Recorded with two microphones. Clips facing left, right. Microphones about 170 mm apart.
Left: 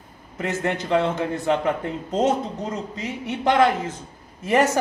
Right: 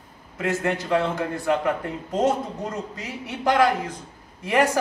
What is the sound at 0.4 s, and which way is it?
Speech, 20° left (ahead or behind).